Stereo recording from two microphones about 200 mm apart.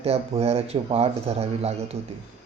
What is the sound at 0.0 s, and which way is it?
Speech, 30° right (ahead or behind).